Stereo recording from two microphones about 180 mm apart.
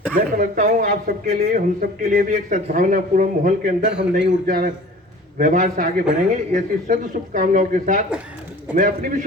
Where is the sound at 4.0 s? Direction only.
65° right (ahead or behind).